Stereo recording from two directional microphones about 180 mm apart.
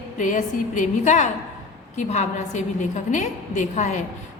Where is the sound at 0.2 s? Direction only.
45° left (ahead or behind).